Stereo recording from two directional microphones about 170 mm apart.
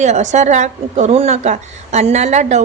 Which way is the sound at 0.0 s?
45° right (ahead or behind).